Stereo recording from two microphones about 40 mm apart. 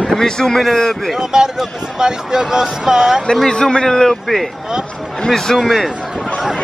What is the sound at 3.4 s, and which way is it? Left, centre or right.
A man's voice, centre.